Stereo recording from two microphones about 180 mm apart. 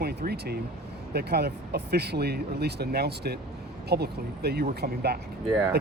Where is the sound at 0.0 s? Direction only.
60° right (ahead or behind).